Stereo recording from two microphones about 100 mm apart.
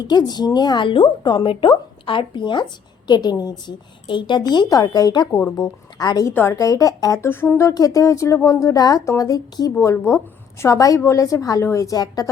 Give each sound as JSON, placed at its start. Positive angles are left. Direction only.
{"t": 0.0, "sound": "a woman's voice", "side_deg": 45}
{"t": 6.3, "sound": "a woman's voice", "side_deg": 25}
{"t": 7.3, "sound": "a woman's voice", "side_deg": 25}